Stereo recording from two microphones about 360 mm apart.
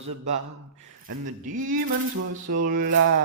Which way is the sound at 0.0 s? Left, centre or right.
Right.